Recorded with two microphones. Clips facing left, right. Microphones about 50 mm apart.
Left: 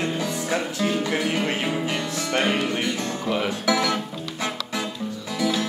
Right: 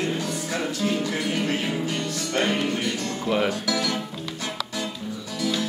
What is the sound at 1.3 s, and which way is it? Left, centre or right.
Music, centre.